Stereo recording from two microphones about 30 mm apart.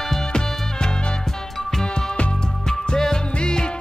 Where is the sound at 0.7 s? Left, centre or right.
Left.